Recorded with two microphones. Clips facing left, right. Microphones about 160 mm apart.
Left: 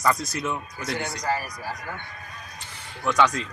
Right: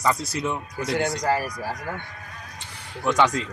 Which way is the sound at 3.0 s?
20° right (ahead or behind).